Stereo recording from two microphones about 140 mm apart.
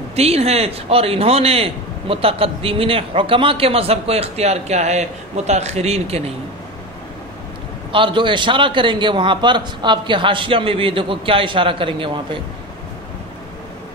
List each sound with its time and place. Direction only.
0.1 s a man's voice: 50° right (ahead or behind)
7.9 s a man's voice: 35° right (ahead or behind)